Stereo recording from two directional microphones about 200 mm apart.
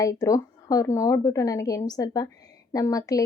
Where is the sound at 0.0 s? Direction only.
15° left (ahead or behind).